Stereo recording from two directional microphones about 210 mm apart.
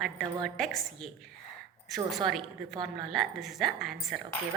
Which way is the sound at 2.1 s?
Centre (ahead or behind).